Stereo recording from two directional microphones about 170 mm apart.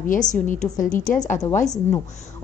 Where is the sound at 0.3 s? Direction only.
45° left (ahead or behind).